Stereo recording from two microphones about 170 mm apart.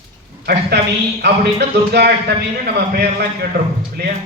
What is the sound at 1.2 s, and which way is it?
A man's voice, 75° right (ahead or behind).